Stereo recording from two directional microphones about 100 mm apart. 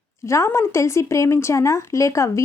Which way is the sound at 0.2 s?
30° left (ahead or behind).